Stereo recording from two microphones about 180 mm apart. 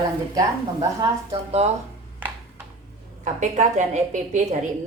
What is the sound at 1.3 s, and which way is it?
Speech, 35° right (ahead or behind).